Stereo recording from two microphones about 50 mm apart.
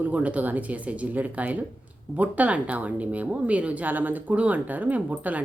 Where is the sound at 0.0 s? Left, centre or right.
Right.